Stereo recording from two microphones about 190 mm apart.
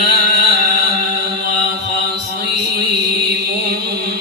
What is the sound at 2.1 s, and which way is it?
Mantra, 60° right (ahead or behind).